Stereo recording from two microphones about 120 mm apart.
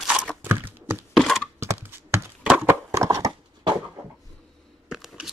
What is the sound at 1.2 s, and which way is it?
Thunk, 5° left (ahead or behind).